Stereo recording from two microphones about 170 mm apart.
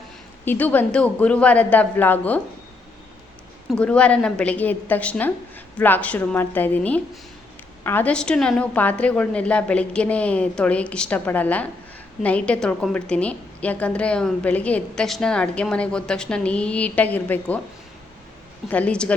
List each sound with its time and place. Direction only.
0.4 s a woman's voice: 10° left (ahead or behind)
3.7 s a woman's voice: 5° left (ahead or behind)
18.7 s a woman's voice: 5° left (ahead or behind)